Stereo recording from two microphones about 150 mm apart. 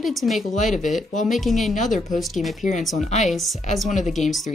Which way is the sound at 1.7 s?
60° left (ahead or behind).